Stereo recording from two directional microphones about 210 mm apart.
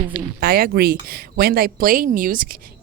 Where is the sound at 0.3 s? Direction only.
45° right (ahead or behind).